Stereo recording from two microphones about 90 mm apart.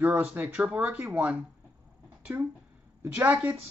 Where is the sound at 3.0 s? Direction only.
30° right (ahead or behind).